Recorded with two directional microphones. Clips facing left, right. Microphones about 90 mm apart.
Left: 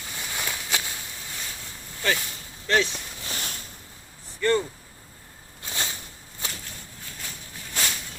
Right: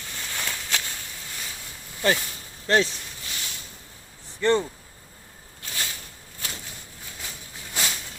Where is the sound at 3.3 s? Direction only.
45° left (ahead or behind).